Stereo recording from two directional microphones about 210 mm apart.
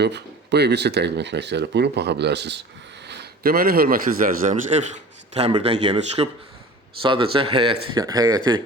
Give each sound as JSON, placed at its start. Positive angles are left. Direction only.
{"t": 0.0, "sound": "a man's voice", "side_deg": -50}